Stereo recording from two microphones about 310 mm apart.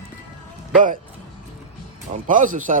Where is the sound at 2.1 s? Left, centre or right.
Right.